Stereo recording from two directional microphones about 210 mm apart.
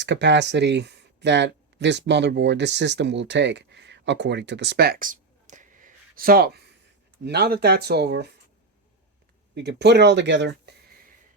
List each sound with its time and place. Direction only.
0.0 s speech: 55° right (ahead or behind)
9.6 s speech: 55° right (ahead or behind)